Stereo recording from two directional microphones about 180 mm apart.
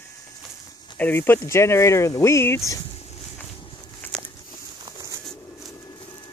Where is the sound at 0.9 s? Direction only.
10° left (ahead or behind).